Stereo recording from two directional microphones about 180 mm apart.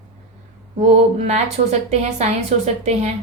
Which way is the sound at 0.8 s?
35° right (ahead or behind).